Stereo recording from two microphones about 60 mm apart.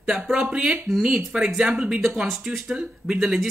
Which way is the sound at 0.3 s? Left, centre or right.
Centre.